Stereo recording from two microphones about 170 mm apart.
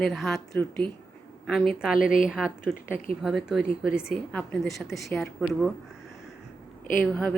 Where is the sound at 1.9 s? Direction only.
55° left (ahead or behind).